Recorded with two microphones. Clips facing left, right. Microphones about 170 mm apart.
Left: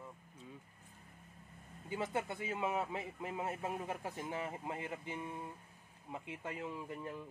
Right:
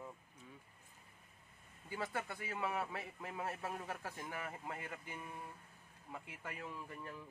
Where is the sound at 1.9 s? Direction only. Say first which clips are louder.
Left 4 dB; 20° left (ahead or behind).